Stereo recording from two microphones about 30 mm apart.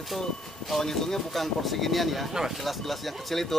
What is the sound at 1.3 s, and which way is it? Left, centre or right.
Speech, centre.